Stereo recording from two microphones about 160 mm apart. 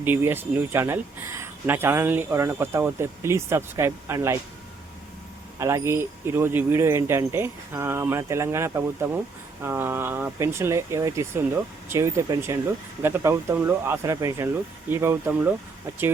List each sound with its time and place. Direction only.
0.0 s speech: 15° right (ahead or behind)
5.5 s speech: 15° right (ahead or behind)